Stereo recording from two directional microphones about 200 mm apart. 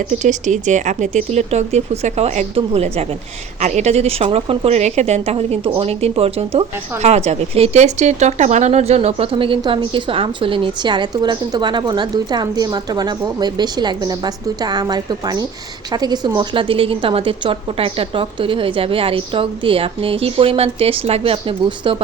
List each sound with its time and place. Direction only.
0.1 s a woman's voice: 35° right (ahead or behind)